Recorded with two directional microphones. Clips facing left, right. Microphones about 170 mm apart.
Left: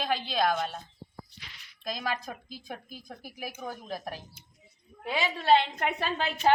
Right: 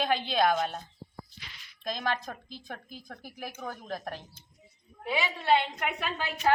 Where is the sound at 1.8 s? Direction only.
5° left (ahead or behind).